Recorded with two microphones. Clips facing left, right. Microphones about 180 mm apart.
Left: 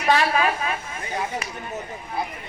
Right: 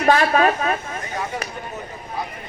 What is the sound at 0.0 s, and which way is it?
Speech, 45° right (ahead or behind).